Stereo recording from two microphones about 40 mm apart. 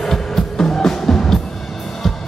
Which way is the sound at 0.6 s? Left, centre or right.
Centre.